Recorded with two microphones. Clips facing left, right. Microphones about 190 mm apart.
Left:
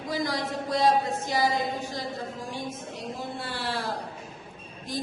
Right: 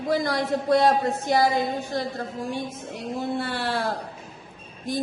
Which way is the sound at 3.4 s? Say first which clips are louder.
Right 5 dB; 60° right (ahead or behind).